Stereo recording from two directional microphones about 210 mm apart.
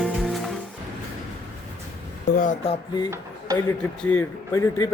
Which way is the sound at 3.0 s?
15° right (ahead or behind).